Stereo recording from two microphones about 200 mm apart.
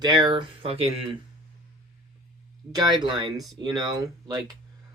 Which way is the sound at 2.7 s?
20° right (ahead or behind).